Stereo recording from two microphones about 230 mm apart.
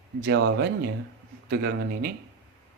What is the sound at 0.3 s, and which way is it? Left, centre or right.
Speech, right.